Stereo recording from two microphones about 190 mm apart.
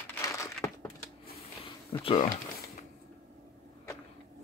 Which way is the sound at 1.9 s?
25° left (ahead or behind).